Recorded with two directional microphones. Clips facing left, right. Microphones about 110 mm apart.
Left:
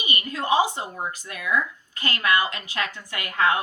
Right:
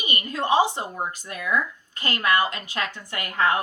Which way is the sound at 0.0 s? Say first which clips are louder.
Right 1 dB; 40° right (ahead or behind).